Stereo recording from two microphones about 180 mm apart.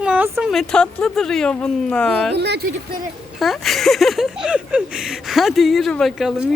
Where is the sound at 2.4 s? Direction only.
65° right (ahead or behind).